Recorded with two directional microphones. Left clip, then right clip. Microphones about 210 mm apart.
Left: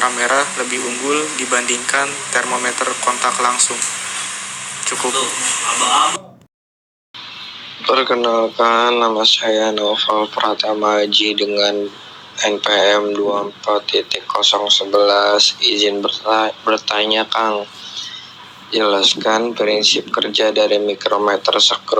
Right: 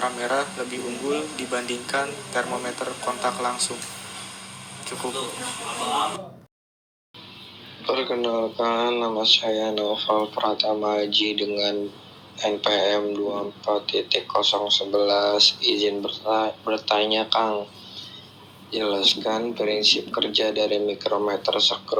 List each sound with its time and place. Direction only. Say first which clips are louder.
0.0 s speech: left 9 dB; 15° left (ahead or behind)
7.9 s speech: left 9 dB; 15° left (ahead or behind)